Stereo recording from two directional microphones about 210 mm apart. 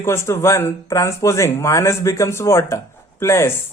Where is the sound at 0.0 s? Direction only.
10° left (ahead or behind).